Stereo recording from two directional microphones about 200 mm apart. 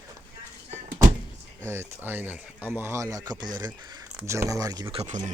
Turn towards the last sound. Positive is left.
turn(degrees=-35)  # may be behind; listen again after turning